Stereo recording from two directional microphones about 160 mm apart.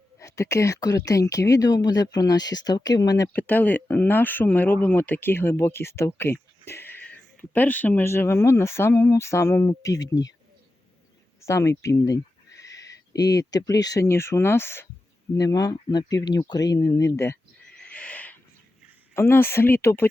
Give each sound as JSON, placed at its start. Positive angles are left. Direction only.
{"t": 0.2, "sound": "speech", "side_deg": 20}
{"t": 3.3, "sound": "speech", "side_deg": 10}
{"t": 11.4, "sound": "speech", "side_deg": 20}
{"t": 17.7, "sound": "owl", "side_deg": 10}
{"t": 19.1, "sound": "speech", "side_deg": 15}